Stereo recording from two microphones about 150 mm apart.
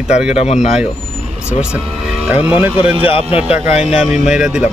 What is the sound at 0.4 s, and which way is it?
Speech, 50° left (ahead or behind).